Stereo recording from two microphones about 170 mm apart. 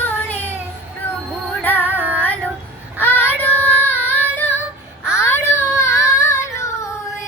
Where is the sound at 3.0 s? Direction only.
10° left (ahead or behind).